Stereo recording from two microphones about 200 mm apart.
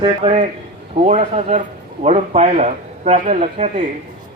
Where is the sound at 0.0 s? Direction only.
30° right (ahead or behind).